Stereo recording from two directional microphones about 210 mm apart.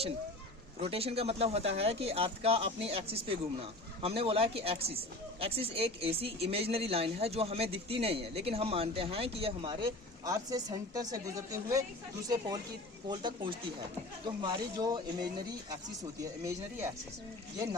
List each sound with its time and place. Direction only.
0.8 s speech: 30° right (ahead or behind)
13.1 s speech: 20° right (ahead or behind)
16.4 s speech: 10° right (ahead or behind)